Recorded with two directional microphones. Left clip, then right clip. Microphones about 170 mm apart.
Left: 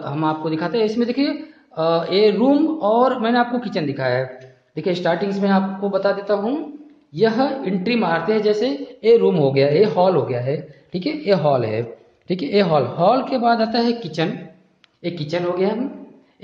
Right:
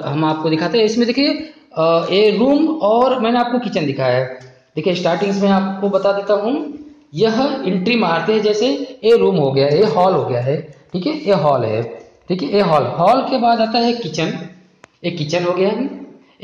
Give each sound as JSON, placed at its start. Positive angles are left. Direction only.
{"t": 0.0, "sound": "a man's voice", "side_deg": 0}